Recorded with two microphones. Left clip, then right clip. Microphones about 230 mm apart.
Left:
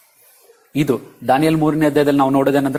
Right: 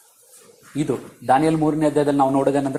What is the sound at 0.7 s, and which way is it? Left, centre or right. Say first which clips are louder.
A man's voice: left 5 dB; left.